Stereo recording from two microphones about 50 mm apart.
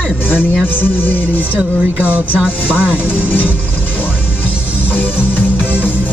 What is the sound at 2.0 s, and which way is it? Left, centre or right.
Music, right.